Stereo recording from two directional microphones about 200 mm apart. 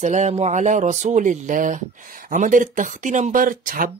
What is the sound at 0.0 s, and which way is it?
Speech, 35° right (ahead or behind).